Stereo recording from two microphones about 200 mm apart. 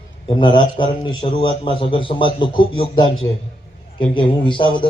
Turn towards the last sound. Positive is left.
turn(degrees=25)  # may be behind; listen again after turning